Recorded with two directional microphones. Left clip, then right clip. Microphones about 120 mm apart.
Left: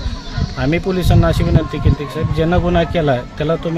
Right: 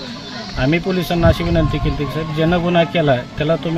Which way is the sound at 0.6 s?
25° left (ahead or behind).